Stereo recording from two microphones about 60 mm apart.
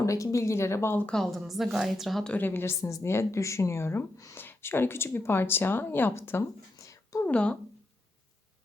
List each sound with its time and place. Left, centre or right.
0.0 s speech: left
1.0 s a woman's voice: centre
2.4 s speech: left
6.7 s a sound: left
7.3 s speech: left